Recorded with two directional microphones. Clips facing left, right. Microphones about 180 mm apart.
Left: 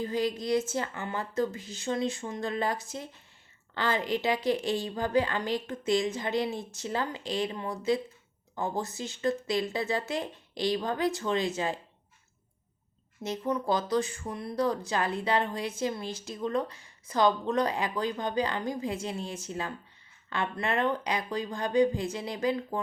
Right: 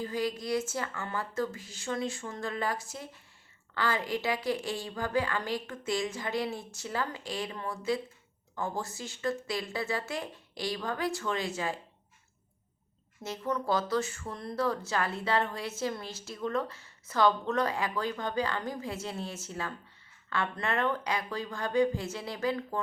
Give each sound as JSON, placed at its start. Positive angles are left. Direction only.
{"t": 0.0, "sound": "a woman's voice", "side_deg": 20}
{"t": 13.2, "sound": "speech", "side_deg": 20}